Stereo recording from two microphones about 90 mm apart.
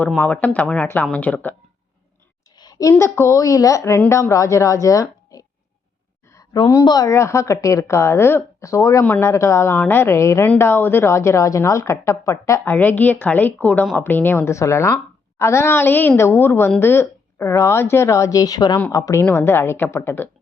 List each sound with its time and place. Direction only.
0.3 s speech: 15° left (ahead or behind)
2.6 s a sound: 45° left (ahead or behind)
3.0 s a woman's voice: 30° left (ahead or behind)
6.8 s speech: 45° left (ahead or behind)
7.1 s a woman's voice: 30° left (ahead or behind)
12.7 s a woman's voice: 20° left (ahead or behind)